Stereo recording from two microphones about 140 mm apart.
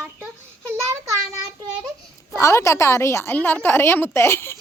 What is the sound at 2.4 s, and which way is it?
A woman's voice, 20° left (ahead or behind).